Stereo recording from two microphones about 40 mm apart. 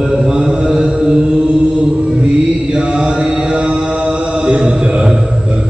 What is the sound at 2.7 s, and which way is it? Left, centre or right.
Mantra, right.